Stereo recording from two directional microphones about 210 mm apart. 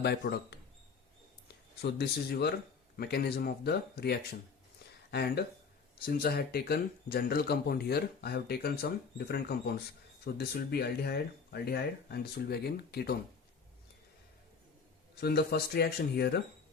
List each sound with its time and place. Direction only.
0.0 s speech: 50° left (ahead or behind)
1.8 s speech: 50° left (ahead or behind)
15.2 s speech: 50° left (ahead or behind)